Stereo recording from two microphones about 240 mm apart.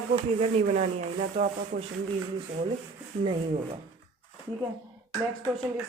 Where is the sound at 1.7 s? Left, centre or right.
Right.